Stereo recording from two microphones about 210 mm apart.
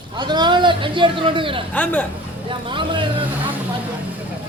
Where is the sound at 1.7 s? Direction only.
5° left (ahead or behind).